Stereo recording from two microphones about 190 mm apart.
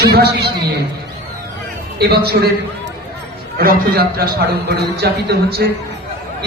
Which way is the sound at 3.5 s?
55° right (ahead or behind).